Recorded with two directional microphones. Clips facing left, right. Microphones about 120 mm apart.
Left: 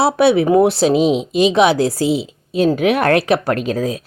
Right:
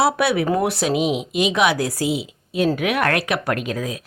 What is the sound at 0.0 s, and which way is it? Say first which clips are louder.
A woman's voice: left 5 dB; 30° left (ahead or behind).